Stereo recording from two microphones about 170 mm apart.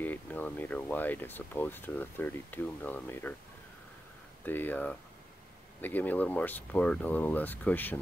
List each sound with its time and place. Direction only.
0.0 s speech: 10° left (ahead or behind)
4.5 s speech: 10° left (ahead or behind)